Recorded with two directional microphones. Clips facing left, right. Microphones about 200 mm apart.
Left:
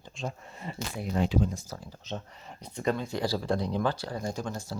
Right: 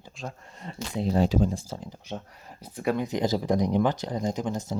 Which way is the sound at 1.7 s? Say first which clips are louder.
Right 2 dB; 15° right (ahead or behind).